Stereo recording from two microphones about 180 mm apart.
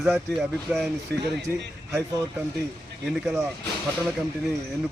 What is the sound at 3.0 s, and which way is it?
Speech, centre (ahead or behind).